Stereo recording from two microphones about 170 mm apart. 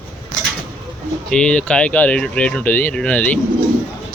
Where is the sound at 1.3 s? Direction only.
5° left (ahead or behind).